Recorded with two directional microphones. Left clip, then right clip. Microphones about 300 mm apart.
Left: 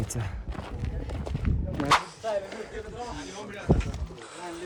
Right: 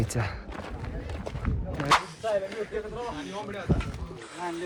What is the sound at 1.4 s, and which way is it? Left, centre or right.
Whip, centre.